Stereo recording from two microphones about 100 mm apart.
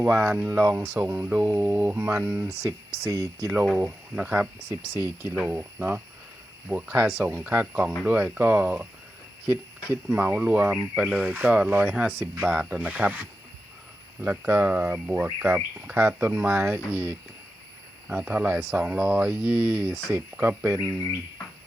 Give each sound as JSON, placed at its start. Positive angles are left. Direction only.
{"t": 0.0, "sound": "speech", "side_deg": -15}
{"t": 2.2, "sound": "speech", "side_deg": -10}
{"t": 2.6, "sound": "speech", "side_deg": -30}
{"t": 3.8, "sound": "speech", "side_deg": -15}
{"t": 5.5, "sound": "speech", "side_deg": -20}
{"t": 9.9, "sound": "speech", "side_deg": -15}
{"t": 20.1, "sound": "speech", "side_deg": -20}